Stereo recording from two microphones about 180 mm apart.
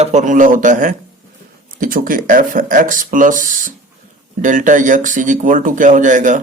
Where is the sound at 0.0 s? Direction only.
40° right (ahead or behind).